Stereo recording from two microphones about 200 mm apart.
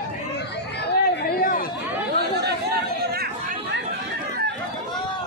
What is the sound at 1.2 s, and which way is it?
Chatter, 45° left (ahead or behind).